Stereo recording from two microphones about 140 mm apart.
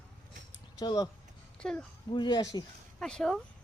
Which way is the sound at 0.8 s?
25° left (ahead or behind).